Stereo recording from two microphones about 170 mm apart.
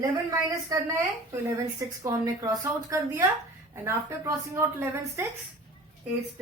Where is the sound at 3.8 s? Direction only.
15° right (ahead or behind).